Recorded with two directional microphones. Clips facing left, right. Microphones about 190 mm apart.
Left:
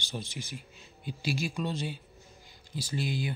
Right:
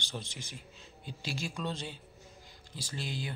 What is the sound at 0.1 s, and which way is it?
Speech, 5° left (ahead or behind).